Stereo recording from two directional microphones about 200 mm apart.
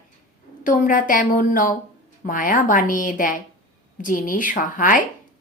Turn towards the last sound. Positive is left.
turn(degrees=40)  # may be behind; listen again after turning